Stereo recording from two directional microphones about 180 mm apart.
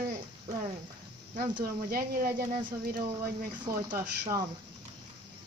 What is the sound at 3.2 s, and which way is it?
Speech, 20° right (ahead or behind).